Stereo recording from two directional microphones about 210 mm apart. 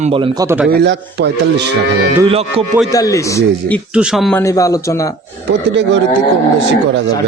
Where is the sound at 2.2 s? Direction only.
25° right (ahead or behind).